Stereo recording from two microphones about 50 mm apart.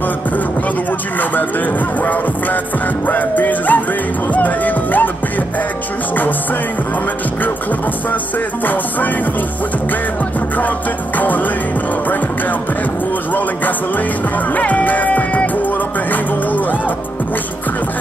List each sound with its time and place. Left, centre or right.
3.1 s music: left
4.3 s speech: left
11.1 s music: left
14.5 s music: left